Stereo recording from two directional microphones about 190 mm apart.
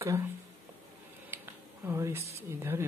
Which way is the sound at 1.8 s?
15° right (ahead or behind).